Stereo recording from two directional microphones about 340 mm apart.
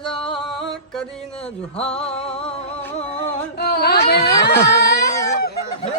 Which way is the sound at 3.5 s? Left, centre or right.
Left.